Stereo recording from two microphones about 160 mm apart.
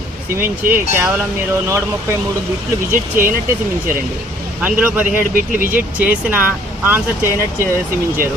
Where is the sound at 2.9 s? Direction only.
60° right (ahead or behind).